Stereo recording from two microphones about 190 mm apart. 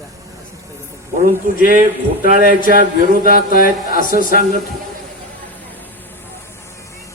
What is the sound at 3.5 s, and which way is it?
Speech, 50° left (ahead or behind).